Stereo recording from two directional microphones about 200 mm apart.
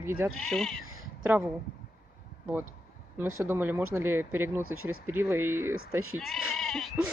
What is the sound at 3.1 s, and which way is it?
Speech, 10° right (ahead or behind).